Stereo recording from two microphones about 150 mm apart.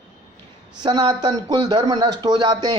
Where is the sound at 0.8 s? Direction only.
30° right (ahead or behind).